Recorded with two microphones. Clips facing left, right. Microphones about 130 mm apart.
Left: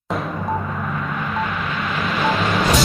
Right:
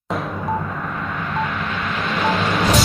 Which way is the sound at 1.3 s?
Centre (ahead or behind).